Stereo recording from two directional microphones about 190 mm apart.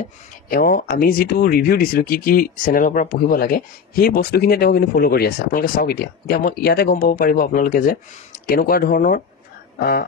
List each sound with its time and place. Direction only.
0.5 s speech: 50° left (ahead or behind)